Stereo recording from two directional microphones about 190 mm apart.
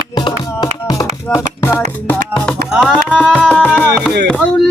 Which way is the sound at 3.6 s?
5° right (ahead or behind).